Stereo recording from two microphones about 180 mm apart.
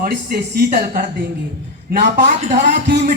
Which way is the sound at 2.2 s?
45° right (ahead or behind).